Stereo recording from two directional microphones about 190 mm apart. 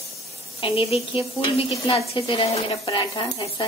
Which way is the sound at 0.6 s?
30° left (ahead or behind).